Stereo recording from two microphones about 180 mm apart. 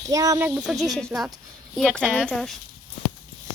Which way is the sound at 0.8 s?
Centre (ahead or behind).